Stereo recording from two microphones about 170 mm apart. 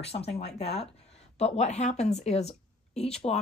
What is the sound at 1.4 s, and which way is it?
Speech, 40° left (ahead or behind).